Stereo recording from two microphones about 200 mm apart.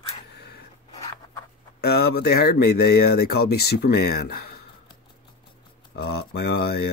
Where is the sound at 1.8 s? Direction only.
55° left (ahead or behind).